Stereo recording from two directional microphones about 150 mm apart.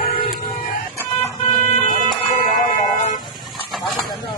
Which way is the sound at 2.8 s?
55° left (ahead or behind).